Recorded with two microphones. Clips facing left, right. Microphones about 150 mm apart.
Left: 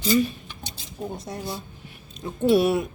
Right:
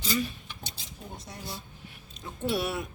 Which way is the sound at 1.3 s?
45° left (ahead or behind).